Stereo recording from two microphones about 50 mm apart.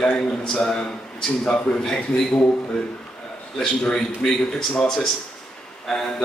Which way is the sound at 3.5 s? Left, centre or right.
Centre.